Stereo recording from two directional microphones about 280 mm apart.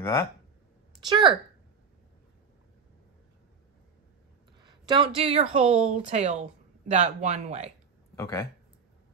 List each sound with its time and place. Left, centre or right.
0.0 s speech: centre
1.0 s speech: centre
4.6 s a woman's voice: centre
8.2 s speech: centre